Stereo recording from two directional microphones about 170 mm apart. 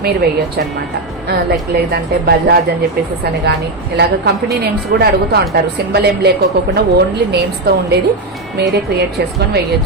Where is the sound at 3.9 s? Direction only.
70° right (ahead or behind).